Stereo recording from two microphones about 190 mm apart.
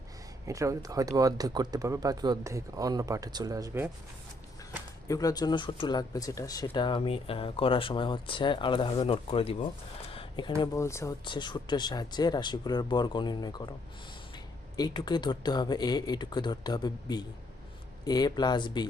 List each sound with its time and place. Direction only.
0.4 s speech: 15° right (ahead or behind)
5.0 s speech: 20° left (ahead or behind)
14.8 s speech: 20° left (ahead or behind)